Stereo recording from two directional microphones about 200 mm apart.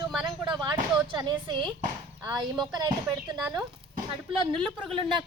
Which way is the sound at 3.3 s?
Centre (ahead or behind).